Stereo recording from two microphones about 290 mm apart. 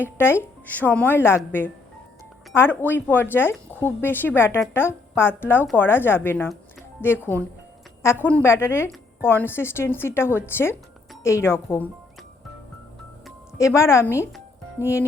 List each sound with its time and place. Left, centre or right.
0.0 s speech: centre
8.0 s speech: centre
13.6 s speech: centre